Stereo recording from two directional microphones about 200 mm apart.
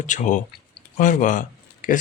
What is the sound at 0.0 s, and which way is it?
A man's voice, 40° left (ahead or behind).